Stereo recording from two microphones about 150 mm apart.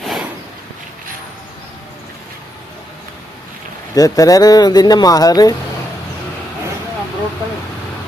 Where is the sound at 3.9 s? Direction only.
25° left (ahead or behind).